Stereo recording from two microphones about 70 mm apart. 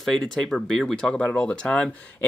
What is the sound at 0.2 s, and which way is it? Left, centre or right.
Speech, centre.